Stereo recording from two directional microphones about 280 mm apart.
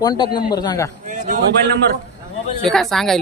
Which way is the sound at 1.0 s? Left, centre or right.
Right.